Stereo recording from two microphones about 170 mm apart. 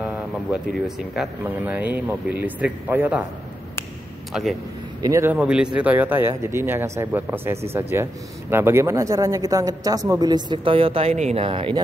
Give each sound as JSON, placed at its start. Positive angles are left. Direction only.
{"t": 0.0, "sound": "speech", "side_deg": -5}
{"t": 4.3, "sound": "speech", "side_deg": 0}
{"t": 5.0, "sound": "speech", "side_deg": -15}